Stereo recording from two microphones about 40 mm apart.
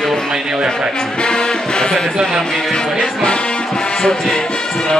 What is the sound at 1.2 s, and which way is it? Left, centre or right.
Speech, left.